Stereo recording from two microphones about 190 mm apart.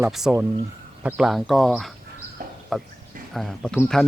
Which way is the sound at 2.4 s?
45° right (ahead or behind).